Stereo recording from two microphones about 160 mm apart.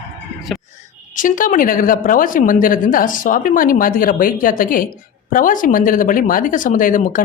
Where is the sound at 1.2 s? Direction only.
55° left (ahead or behind).